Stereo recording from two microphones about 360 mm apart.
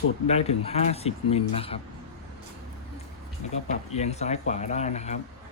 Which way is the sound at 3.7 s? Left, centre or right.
Centre.